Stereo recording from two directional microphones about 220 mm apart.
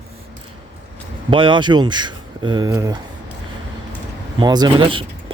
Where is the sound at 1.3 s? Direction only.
20° right (ahead or behind).